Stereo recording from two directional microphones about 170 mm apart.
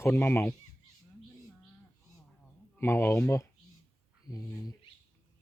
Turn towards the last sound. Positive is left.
turn(degrees=20)  # may be behind; listen again after turning